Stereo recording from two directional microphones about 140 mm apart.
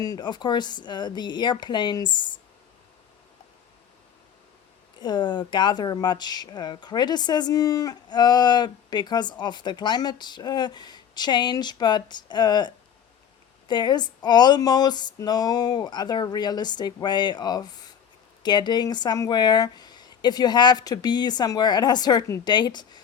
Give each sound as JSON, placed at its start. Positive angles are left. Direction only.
{"t": 0.0, "sound": "speech", "side_deg": 30}
{"t": 4.9, "sound": "speech", "side_deg": 30}